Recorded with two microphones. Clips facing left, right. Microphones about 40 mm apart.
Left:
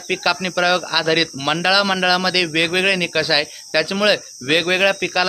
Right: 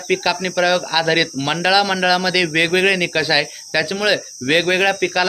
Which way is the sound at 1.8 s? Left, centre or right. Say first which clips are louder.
Even; centre.